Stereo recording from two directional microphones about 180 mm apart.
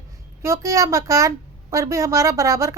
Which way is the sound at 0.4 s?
15° right (ahead or behind).